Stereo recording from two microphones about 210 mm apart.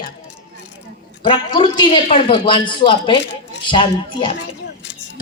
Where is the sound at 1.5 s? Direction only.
20° left (ahead or behind).